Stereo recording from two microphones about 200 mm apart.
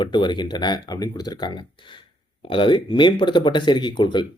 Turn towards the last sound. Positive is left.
turn(degrees=20)  # may be behind; listen again after turning